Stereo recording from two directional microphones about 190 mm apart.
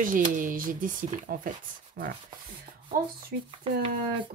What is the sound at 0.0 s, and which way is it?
Speech, 45° right (ahead or behind).